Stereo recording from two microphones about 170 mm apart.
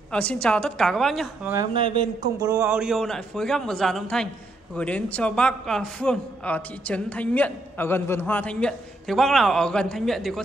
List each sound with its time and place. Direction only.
0.1 s a man's voice: 5° left (ahead or behind)
1.4 s speech: 15° right (ahead or behind)
1.8 s a man's voice: 30° right (ahead or behind)
2.6 s a man's voice: 5° right (ahead or behind)